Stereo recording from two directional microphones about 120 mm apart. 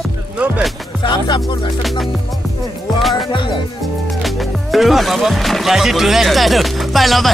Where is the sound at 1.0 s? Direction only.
40° left (ahead or behind).